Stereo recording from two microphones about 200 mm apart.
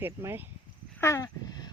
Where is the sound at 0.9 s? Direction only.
15° left (ahead or behind).